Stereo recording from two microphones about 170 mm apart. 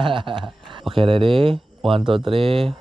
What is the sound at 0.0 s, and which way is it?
Speech, 30° right (ahead or behind).